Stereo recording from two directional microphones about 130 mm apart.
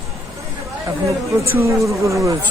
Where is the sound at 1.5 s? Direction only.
20° right (ahead or behind).